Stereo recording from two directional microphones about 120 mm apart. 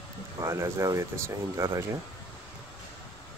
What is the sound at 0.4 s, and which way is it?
Speech, 25° right (ahead or behind).